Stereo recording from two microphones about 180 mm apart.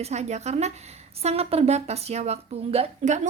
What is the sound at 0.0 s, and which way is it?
Speech, 40° right (ahead or behind).